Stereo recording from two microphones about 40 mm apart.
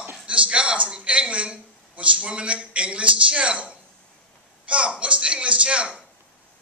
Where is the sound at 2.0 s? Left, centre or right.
Right.